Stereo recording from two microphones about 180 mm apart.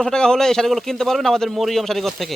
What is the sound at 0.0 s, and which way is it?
Speech, 5° left (ahead or behind).